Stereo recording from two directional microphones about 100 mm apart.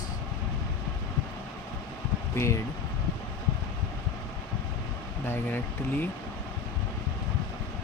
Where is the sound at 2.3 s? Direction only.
25° left (ahead or behind).